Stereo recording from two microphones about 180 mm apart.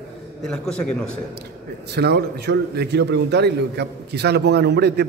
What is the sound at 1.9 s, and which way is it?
A man's voice, 65° right (ahead or behind).